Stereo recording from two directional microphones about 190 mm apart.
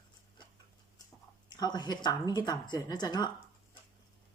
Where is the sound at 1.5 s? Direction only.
20° left (ahead or behind).